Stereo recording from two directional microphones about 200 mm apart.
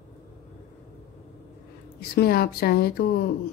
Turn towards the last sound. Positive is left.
turn(degrees=50)  # may be behind; listen again after turning